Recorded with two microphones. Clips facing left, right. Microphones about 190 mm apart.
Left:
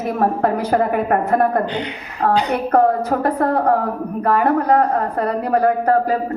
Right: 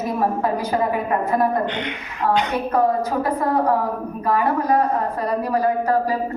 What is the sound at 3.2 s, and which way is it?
A woman's voice, 60° left (ahead or behind).